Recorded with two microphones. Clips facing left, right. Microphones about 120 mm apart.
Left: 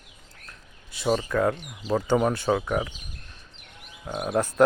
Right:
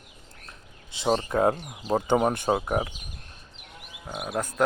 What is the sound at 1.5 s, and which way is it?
Speech, 45° right (ahead or behind).